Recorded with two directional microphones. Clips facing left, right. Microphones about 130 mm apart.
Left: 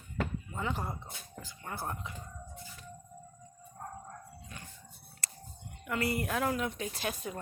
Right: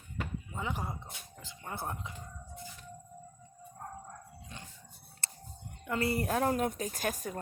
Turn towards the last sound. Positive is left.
turn(degrees=-45)  # may be behind; listen again after turning